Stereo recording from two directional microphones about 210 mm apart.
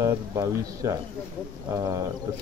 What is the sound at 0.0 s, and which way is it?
Speech, 15° right (ahead or behind).